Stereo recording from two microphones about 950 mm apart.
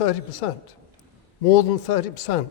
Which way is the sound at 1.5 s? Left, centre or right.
Left.